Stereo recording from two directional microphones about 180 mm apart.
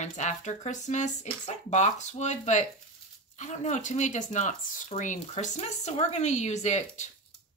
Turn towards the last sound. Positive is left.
turn(degrees=40)  # may be behind; listen again after turning